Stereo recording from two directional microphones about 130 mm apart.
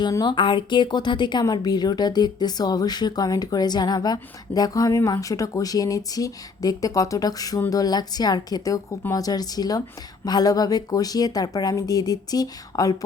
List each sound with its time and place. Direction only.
0.0 s a woman's voice: 35° left (ahead or behind)